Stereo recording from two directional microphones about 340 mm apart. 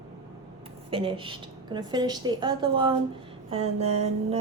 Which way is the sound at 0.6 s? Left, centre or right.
Centre.